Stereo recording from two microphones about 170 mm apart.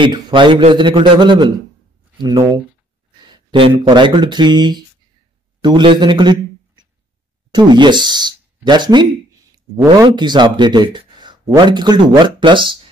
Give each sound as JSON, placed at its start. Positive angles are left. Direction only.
{"t": 0.0, "sound": "speech", "side_deg": -30}
{"t": 3.8, "sound": "speech", "side_deg": -25}
{"t": 7.5, "sound": "speech", "side_deg": -25}
{"t": 10.0, "sound": "speech", "side_deg": -25}